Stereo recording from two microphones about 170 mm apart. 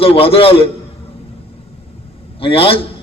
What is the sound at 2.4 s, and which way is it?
Speech, 35° left (ahead or behind).